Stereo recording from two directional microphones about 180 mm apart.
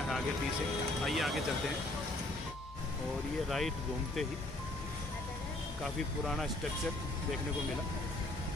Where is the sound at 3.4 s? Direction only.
Centre (ahead or behind).